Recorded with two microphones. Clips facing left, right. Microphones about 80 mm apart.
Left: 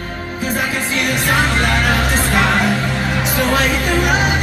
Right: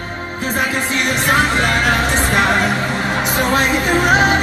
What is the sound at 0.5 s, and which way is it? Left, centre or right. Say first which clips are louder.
Music: right 2 dB; right.